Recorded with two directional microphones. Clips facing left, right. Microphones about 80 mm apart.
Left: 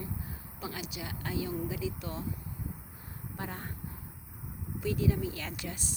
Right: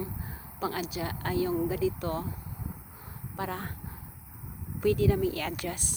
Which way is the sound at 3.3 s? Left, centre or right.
Right.